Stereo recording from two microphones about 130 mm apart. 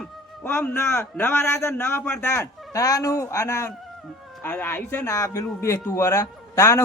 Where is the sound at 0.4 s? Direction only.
15° left (ahead or behind).